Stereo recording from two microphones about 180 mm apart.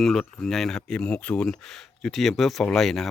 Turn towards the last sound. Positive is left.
turn(degrees=0)  # may be behind; listen again after turning